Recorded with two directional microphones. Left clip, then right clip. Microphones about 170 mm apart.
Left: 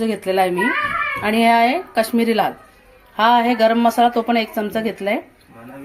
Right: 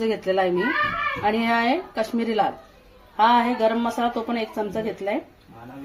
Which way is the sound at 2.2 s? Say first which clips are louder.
Left 5 dB; 50° left (ahead or behind).